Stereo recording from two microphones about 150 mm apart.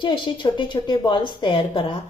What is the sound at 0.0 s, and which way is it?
A woman's voice, 30° left (ahead or behind).